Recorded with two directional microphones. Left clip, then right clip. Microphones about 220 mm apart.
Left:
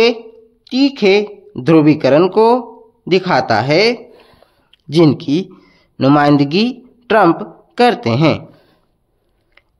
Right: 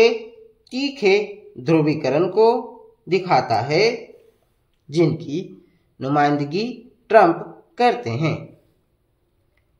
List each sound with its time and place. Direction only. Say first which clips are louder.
0.7 s speech: left 6 dB; 35° left (ahead or behind)